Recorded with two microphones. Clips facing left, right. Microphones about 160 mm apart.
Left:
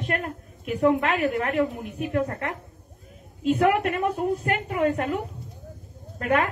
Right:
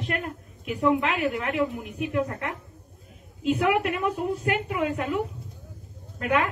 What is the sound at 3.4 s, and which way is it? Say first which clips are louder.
A woman's voice: left 2 dB; 40° left (ahead or behind).